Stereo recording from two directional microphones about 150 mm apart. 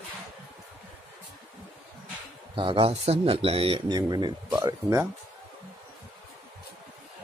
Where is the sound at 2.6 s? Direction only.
35° right (ahead or behind).